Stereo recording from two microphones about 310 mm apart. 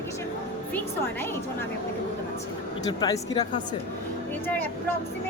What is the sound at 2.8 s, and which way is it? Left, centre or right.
Speech, centre.